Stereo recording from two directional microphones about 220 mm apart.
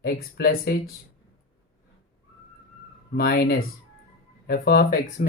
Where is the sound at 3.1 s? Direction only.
45° left (ahead or behind).